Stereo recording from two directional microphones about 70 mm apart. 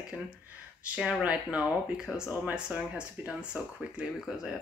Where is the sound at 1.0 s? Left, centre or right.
Centre.